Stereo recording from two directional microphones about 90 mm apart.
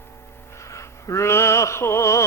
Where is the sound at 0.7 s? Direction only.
35° left (ahead or behind).